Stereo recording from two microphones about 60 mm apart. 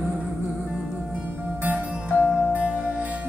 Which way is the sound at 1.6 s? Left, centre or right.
Right.